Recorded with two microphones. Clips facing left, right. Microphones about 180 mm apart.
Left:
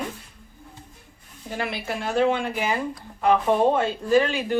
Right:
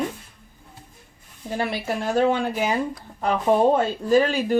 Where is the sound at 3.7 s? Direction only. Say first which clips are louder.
Right 1 dB; 40° right (ahead or behind).